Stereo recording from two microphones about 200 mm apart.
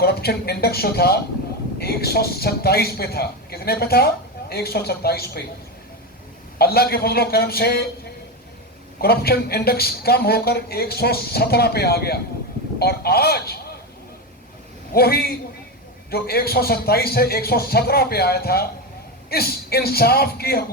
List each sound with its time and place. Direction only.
0.0 s a man's voice: 50° left (ahead or behind)
6.6 s a man's voice: 50° left (ahead or behind)
9.0 s a man's voice: 50° left (ahead or behind)
14.9 s a man's voice: 50° left (ahead or behind)